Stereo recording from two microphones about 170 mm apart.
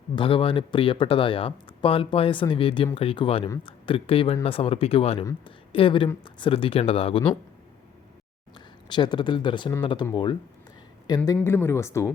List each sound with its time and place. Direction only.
0.2 s speech: 30° left (ahead or behind)
8.5 s speech: 25° left (ahead or behind)
11.3 s speech: 15° left (ahead or behind)